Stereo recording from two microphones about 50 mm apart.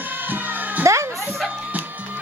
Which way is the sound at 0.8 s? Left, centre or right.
Right.